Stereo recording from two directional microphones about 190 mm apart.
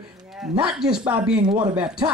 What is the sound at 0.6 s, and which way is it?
Speech, 5° right (ahead or behind).